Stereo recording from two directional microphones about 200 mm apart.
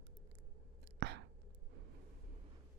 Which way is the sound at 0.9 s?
55° right (ahead or behind).